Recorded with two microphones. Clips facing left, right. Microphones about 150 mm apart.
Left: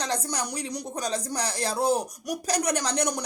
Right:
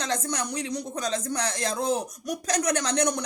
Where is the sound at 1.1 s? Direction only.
35° left (ahead or behind).